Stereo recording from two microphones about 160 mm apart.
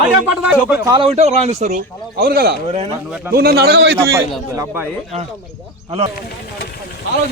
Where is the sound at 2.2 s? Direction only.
75° right (ahead or behind).